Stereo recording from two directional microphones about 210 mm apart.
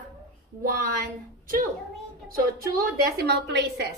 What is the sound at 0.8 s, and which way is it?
A woman's voice, 40° right (ahead or behind).